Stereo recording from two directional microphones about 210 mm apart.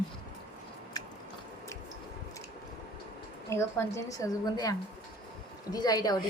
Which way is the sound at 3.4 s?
15° left (ahead or behind).